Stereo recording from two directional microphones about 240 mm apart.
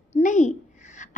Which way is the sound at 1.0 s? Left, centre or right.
Left.